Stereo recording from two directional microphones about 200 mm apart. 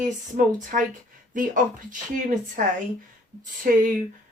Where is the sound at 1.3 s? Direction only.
40° right (ahead or behind).